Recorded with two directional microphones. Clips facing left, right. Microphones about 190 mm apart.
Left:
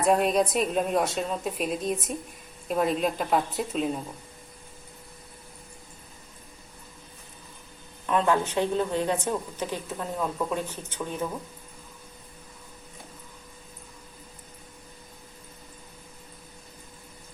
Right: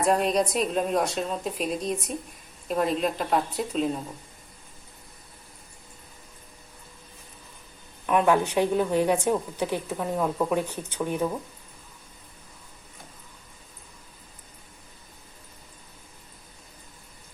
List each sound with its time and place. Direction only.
0.0 s a woman's voice: centre (ahead or behind)
8.0 s speech: 15° right (ahead or behind)